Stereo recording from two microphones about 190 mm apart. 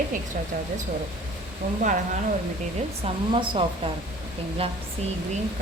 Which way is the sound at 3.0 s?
25° right (ahead or behind).